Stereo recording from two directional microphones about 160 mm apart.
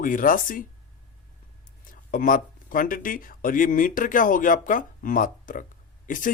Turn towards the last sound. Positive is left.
turn(degrees=55)  # may be behind; listen again after turning